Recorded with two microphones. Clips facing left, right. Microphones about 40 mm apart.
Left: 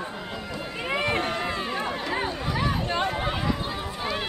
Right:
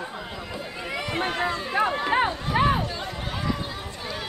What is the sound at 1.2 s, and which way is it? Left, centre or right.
Run, right.